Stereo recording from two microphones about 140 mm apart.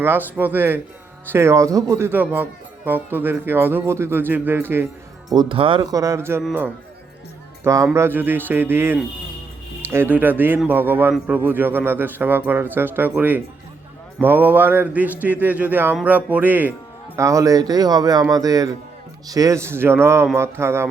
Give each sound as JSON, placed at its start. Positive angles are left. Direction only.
{"t": 0.0, "sound": "speech", "side_deg": -15}
{"t": 5.3, "sound": "speech", "side_deg": -35}
{"t": 5.9, "sound": "a man's voice", "side_deg": -25}
{"t": 7.6, "sound": "a man's voice", "side_deg": -20}